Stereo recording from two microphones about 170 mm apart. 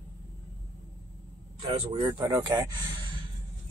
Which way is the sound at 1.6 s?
25° right (ahead or behind).